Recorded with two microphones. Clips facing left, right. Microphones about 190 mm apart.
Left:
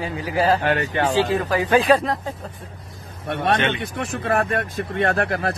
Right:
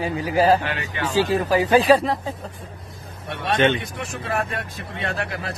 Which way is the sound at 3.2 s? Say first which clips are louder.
Right 1 dB; 55° left (ahead or behind).